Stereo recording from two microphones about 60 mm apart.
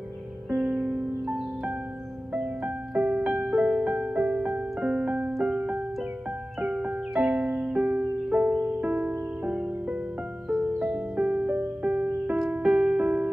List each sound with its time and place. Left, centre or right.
0.6 s music: right
2.3 s music: centre